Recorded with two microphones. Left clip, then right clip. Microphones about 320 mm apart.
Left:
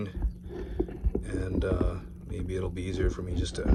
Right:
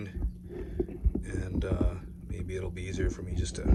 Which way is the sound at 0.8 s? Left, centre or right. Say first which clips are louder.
Left 2 dB; centre.